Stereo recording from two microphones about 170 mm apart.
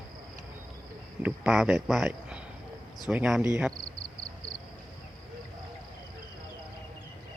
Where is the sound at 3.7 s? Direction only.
55° right (ahead or behind).